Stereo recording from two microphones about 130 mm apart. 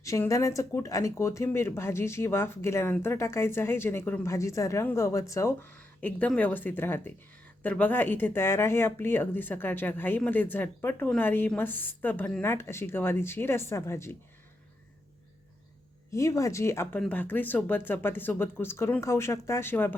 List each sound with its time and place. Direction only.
0.0 s speech: 25° left (ahead or behind)
16.1 s speech: 25° left (ahead or behind)